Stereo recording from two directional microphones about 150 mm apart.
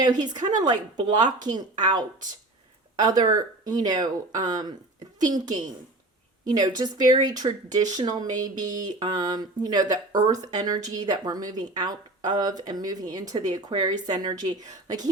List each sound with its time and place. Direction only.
0.0 s speech: 25° right (ahead or behind)